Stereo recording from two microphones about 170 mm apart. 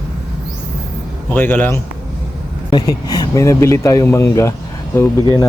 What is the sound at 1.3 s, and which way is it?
Speech, 10° left (ahead or behind).